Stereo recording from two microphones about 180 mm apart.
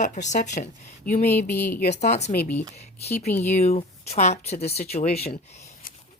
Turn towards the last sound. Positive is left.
turn(degrees=40)  # may be behind; listen again after turning